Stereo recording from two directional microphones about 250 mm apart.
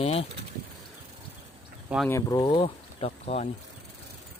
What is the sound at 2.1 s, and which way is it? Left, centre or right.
Speech, centre.